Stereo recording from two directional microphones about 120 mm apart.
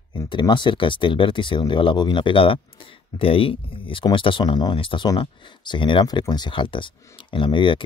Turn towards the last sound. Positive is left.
turn(degrees=45)  # may be behind; listen again after turning